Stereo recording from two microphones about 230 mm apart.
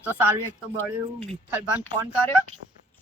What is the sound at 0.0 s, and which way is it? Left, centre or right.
Speech, centre.